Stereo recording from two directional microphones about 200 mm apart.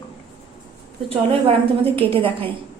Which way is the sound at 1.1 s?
30° right (ahead or behind).